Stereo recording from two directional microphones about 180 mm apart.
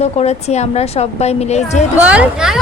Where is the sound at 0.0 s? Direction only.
35° left (ahead or behind).